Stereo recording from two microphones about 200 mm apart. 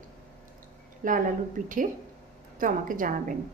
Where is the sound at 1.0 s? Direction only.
40° right (ahead or behind).